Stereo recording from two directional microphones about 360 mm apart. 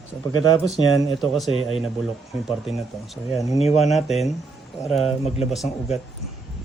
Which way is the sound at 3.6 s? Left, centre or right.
Centre.